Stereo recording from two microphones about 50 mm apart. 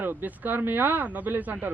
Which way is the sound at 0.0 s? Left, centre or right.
Right.